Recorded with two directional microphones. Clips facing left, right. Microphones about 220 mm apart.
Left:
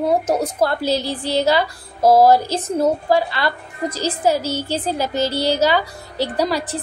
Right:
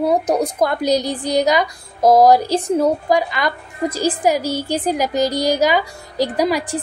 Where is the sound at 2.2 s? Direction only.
15° right (ahead or behind).